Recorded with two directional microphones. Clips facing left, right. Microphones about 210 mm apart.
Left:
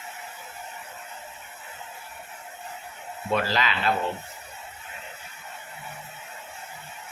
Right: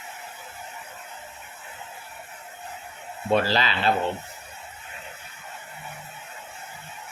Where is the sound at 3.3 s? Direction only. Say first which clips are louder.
Right 3 dB; 30° right (ahead or behind).